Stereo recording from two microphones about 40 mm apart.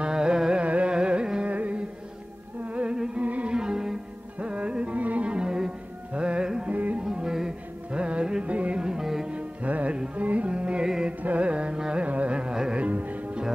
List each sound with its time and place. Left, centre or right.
0.0 s carnatic music: centre
1.5 s music: right
3.5 s music: centre
4.4 s music: right
6.7 s music: right
7.1 s music: centre; by 8.7 s right
8.7 s music: centre
9.3 s music: right
11.2 s carnatic music: right
12.7 s music: right